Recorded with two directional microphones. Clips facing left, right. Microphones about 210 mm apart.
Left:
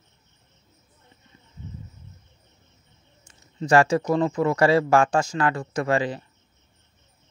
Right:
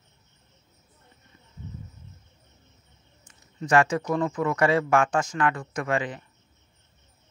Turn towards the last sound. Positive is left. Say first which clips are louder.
# left 4 dB
turn(degrees=30)  # may be behind; listen again after turning